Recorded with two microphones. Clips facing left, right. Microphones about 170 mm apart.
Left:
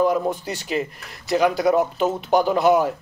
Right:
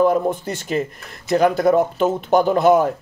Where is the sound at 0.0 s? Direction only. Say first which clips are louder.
Right 3 dB; 50° right (ahead or behind).